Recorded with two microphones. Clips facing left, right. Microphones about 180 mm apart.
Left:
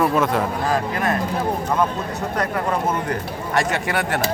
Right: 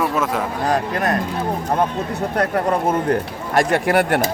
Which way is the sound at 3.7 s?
55° right (ahead or behind).